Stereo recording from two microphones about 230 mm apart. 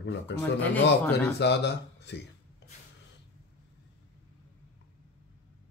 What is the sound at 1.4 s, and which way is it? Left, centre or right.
Speech, left.